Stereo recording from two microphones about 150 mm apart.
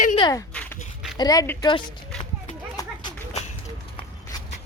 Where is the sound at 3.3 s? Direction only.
45° left (ahead or behind).